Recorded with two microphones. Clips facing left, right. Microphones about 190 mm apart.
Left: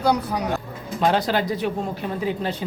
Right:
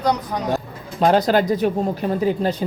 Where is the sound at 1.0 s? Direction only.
40° right (ahead or behind).